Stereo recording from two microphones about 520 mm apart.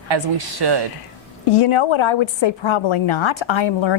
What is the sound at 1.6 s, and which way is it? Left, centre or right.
A woman's voice, left.